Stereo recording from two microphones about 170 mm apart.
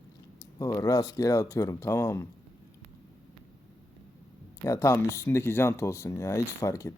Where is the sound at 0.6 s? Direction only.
20° left (ahead or behind).